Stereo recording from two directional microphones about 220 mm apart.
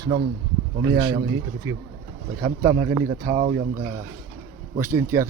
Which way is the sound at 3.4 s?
35° right (ahead or behind).